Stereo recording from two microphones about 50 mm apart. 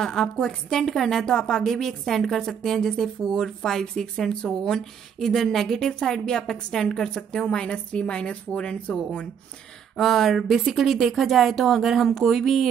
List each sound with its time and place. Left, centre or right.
0.0 s a woman's voice: centre
9.9 s speech: centre